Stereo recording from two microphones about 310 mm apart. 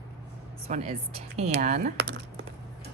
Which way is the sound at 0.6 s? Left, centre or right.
Centre.